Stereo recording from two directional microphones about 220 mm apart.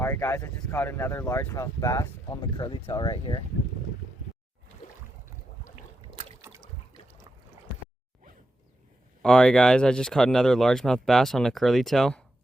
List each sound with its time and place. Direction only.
0.0 s speech: 10° left (ahead or behind)
9.2 s speech: 5° left (ahead or behind)